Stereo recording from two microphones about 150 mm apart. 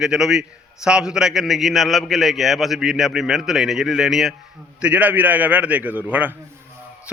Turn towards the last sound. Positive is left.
turn(degrees=-10)  # may be behind; listen again after turning